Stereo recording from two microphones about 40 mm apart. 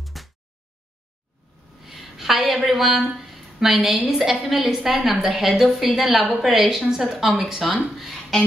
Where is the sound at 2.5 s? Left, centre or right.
Centre.